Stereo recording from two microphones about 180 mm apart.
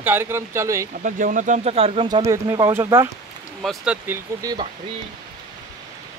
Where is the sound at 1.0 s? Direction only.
50° right (ahead or behind); by 3.0 s 15° right (ahead or behind).